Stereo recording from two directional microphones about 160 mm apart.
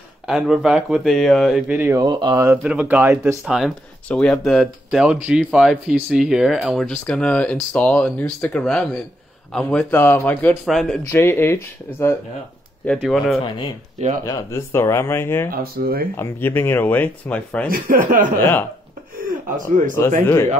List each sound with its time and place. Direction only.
0.3 s speech: 5° right (ahead or behind)
1.7 s speech: 15° right (ahead or behind)
2.0 s speech: 25° right (ahead or behind)
2.6 s speech: 5° right (ahead or behind); by 10.6 s 10° left (ahead or behind)
10.6 s speech: centre (ahead or behind)
11.1 s speech: 15° left (ahead or behind)
12.8 s speech: centre (ahead or behind)
14.2 s speech: 20° left (ahead or behind)
15.5 s speech: 70° right (ahead or behind)
16.2 s speech: 15° left (ahead or behind)
17.6 s speech: 60° right (ahead or behind)
18.4 s speech: 15° left (ahead or behind)
19.1 s speech: 55° right (ahead or behind)